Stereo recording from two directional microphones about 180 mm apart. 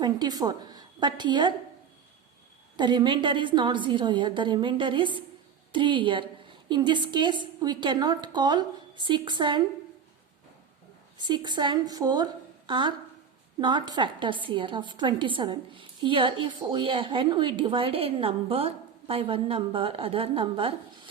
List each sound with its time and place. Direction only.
0.0 s a woman's voice: 20° right (ahead or behind)
2.7 s a woman's voice: 25° right (ahead or behind)
11.2 s a woman's voice: 25° right (ahead or behind)